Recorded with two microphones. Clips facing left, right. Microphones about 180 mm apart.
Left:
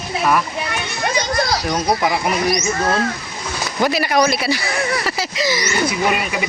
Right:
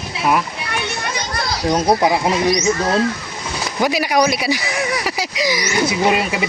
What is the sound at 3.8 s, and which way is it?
Speech, 10° right (ahead or behind).